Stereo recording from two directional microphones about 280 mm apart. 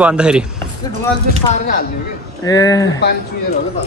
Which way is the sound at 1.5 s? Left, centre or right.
Left.